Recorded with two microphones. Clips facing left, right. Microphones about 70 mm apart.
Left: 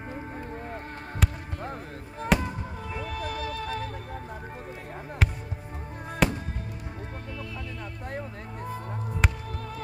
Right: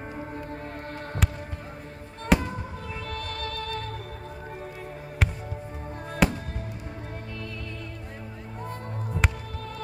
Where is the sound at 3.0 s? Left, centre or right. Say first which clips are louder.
Left 2 dB; centre.